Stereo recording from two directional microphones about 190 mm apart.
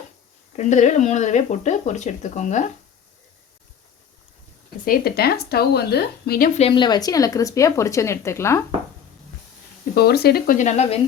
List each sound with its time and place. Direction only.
0.5 s speech: 40° left (ahead or behind)
4.9 s speech: 55° left (ahead or behind)
6.6 s speech: 25° left (ahead or behind)
9.9 s speech: 55° left (ahead or behind); by 10.9 s 35° left (ahead or behind)